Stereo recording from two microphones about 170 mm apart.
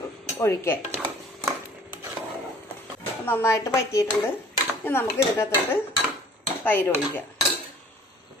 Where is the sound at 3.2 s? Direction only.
15° left (ahead or behind).